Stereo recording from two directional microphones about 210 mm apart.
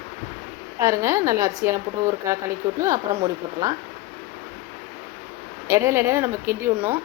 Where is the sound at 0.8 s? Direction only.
15° right (ahead or behind).